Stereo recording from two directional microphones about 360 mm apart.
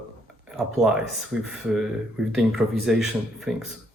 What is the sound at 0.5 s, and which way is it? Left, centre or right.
Speech, centre.